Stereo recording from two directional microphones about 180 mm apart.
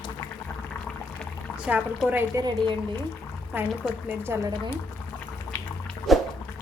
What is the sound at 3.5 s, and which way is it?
Speech, 10° right (ahead or behind).